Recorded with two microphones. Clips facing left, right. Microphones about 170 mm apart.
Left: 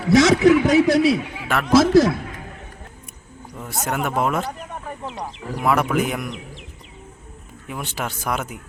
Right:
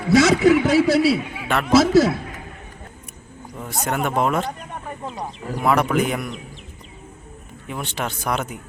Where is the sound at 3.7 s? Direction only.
5° left (ahead or behind).